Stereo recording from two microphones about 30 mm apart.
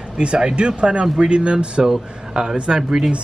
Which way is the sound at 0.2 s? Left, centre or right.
Right.